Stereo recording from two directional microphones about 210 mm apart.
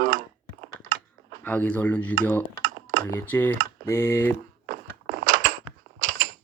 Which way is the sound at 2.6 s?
40° right (ahead or behind).